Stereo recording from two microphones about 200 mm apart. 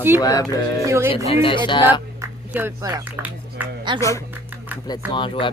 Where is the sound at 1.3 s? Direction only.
25° left (ahead or behind).